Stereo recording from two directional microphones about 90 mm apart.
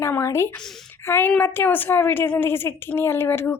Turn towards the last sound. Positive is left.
turn(degrees=25)  # may be behind; listen again after turning